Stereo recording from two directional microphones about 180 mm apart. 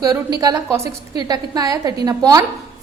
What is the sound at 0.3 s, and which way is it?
A woman's voice, 20° right (ahead or behind).